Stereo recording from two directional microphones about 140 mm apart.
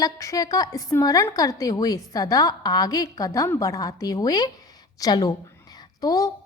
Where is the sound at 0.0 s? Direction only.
25° left (ahead or behind).